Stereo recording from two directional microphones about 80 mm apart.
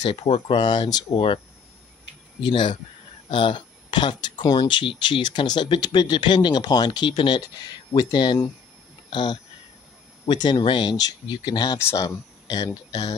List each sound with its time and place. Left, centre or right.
0.0 s speech: left
2.4 s speech: left
3.3 s speech: left
7.9 s speech: left